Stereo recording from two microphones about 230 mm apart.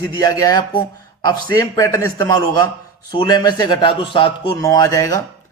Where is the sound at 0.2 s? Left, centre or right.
Centre.